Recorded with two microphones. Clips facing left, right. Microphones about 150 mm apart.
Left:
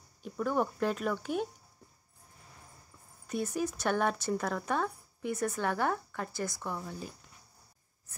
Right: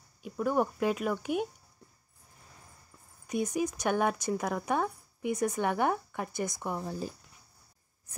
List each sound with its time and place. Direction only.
0.2 s speech: 10° right (ahead or behind)
3.3 s speech: 15° right (ahead or behind)
6.8 s speech: 35° right (ahead or behind)